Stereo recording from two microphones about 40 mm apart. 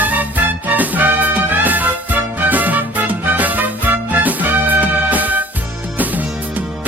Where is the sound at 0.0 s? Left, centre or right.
Right.